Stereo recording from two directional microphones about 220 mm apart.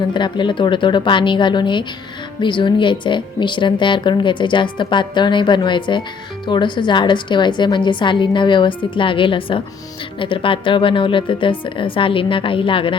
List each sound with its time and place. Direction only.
0.1 s a woman's voice: 20° left (ahead or behind)